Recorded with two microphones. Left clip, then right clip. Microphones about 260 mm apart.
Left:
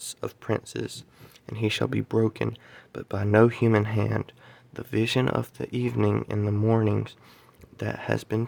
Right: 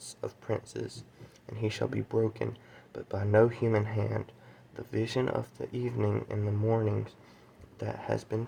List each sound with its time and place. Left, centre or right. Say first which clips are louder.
0.0 s speech: left 5 dB; left